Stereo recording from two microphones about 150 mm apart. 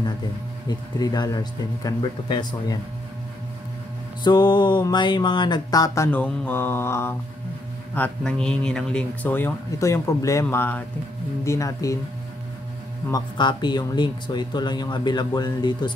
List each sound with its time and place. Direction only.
0.7 s speech: 25° left (ahead or behind)
4.2 s a sound: 30° left (ahead or behind)
6.0 s speech: 10° left (ahead or behind)
13.1 s speech: 30° left (ahead or behind)